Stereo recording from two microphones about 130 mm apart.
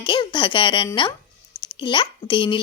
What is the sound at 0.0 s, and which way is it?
Speech, 35° left (ahead or behind).